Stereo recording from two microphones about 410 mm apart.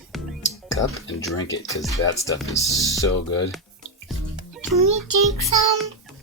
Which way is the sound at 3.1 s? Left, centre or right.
Left.